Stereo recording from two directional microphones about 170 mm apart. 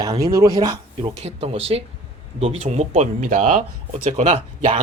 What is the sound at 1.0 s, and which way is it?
Speech, 35° right (ahead or behind).